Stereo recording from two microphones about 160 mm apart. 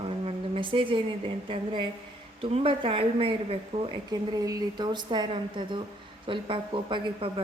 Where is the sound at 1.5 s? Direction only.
30° right (ahead or behind).